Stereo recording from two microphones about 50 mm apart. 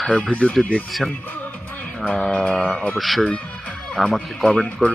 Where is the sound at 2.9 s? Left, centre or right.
Centre.